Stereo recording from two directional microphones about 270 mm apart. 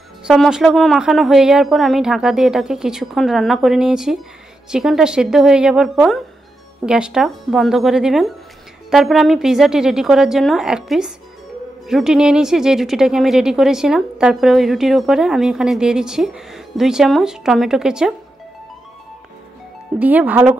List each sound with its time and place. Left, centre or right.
0.2 s a woman's voice: centre
20.0 s a woman's voice: centre